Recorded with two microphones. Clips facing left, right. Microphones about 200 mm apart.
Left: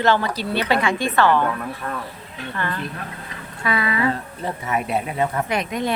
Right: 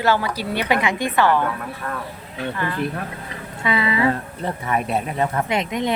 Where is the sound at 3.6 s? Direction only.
25° right (ahead or behind).